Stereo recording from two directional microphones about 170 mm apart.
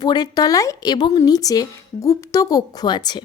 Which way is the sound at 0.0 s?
25° left (ahead or behind).